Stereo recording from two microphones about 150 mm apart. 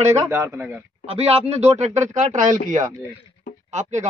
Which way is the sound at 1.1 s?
45° right (ahead or behind).